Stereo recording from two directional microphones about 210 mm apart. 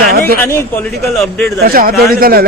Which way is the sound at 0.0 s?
45° right (ahead or behind).